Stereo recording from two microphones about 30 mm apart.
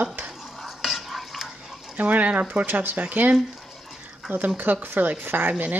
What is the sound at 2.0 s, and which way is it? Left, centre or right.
Speech, right.